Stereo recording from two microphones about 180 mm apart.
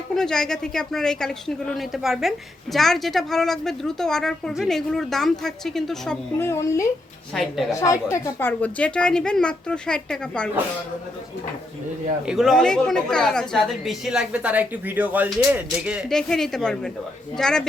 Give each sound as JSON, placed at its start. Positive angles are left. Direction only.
{"t": 0.2, "sound": "a woman's voice", "side_deg": 5}
{"t": 6.4, "sound": "speech", "side_deg": 15}
{"t": 7.3, "sound": "a woman's voice", "side_deg": 0}
{"t": 7.7, "sound": "a woman's voice", "side_deg": 15}
{"t": 12.2, "sound": "a woman's voice", "side_deg": -5}